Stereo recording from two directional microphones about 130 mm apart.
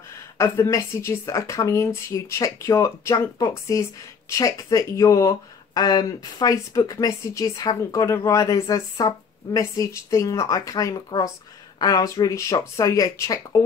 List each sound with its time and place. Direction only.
0.4 s speech: 20° left (ahead or behind)